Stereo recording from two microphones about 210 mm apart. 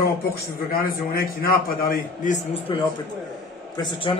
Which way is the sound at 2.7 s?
25° left (ahead or behind).